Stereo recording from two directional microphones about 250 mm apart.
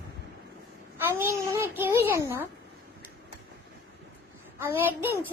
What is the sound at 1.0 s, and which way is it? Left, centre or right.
Speech, centre.